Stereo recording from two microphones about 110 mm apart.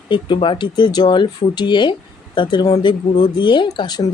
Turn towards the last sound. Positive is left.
turn(degrees=40)  # may be behind; listen again after turning